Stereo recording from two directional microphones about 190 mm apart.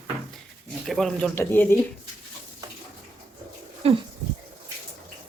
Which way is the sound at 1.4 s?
10° left (ahead or behind).